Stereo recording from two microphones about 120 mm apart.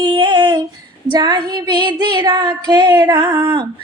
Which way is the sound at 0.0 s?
45° right (ahead or behind).